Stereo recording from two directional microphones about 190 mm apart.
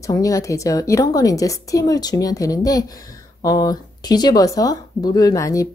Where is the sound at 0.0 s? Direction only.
15° left (ahead or behind).